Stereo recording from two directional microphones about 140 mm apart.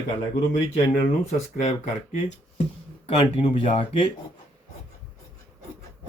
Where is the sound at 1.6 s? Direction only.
50° left (ahead or behind).